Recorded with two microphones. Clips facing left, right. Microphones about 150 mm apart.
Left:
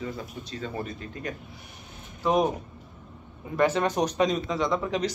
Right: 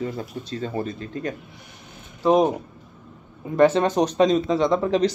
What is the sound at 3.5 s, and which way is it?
A man's voice, 25° right (ahead or behind).